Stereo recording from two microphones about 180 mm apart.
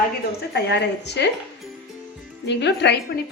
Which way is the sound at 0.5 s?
70° left (ahead or behind).